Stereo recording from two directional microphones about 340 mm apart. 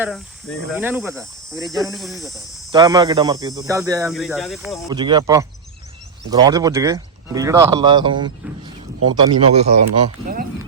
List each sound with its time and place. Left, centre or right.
0.8 s cricket: centre
1.5 s speech: centre
2.0 s cricket: centre
2.7 s speech: centre
4.9 s speech: centre
9.1 s speech: centre